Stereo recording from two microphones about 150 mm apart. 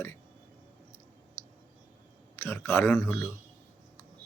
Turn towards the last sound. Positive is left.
turn(degrees=10)  # may be behind; listen again after turning